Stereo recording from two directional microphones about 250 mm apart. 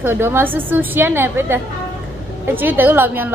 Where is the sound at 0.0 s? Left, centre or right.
Centre.